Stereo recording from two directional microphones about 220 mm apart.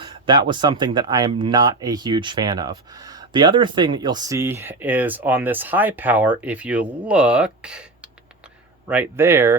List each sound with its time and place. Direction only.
0.0 s speech: 20° right (ahead or behind)